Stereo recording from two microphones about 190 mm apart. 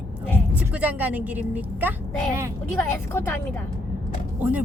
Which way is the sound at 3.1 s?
10° left (ahead or behind).